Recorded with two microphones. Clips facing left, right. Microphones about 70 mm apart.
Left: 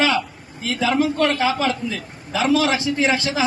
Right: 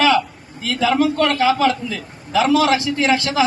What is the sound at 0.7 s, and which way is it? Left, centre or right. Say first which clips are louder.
A man's voice: right 3 dB; left.